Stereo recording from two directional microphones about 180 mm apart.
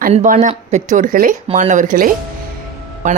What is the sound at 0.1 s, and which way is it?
A woman's voice, 40° right (ahead or behind).